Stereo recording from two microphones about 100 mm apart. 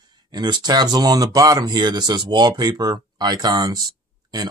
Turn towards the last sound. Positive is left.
turn(degrees=-40)  # may be behind; listen again after turning